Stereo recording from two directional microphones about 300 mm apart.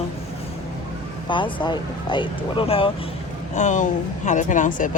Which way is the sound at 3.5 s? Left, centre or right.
Left.